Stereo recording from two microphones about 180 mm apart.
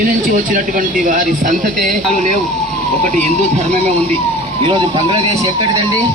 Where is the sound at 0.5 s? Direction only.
50° right (ahead or behind).